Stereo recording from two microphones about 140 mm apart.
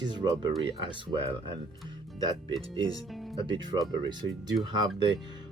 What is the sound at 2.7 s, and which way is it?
Speech, 25° left (ahead or behind).